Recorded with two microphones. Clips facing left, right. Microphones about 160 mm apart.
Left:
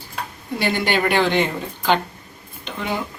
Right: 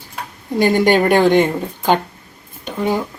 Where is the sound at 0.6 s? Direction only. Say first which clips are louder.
Right 8 dB; 45° right (ahead or behind).